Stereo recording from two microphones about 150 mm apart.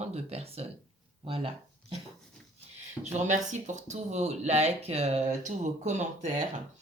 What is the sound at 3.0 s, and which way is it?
Speech, 50° right (ahead or behind).